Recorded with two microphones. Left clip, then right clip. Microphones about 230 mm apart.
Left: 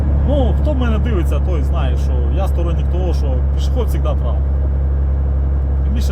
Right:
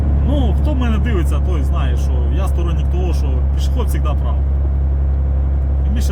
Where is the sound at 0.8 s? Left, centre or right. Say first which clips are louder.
Left 1 dB; centre.